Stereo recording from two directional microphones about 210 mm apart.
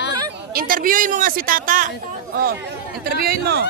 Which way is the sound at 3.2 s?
50° right (ahead or behind).